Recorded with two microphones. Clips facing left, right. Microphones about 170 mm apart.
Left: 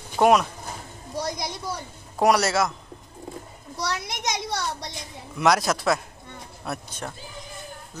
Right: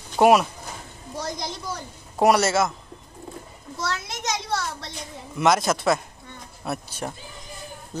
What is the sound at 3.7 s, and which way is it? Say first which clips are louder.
A child's voice: even; 15° left (ahead or behind).